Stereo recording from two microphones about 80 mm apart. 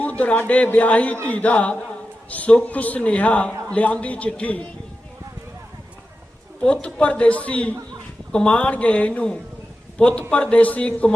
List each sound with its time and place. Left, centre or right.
0.0 s a man's voice: centre
6.8 s a man's voice: centre